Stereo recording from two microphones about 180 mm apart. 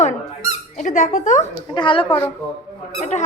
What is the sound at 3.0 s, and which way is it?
Speech, 40° left (ahead or behind).